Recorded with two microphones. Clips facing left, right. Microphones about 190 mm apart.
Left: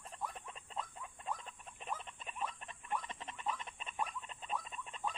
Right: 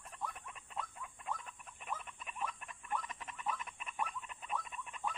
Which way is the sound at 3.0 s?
30° left (ahead or behind).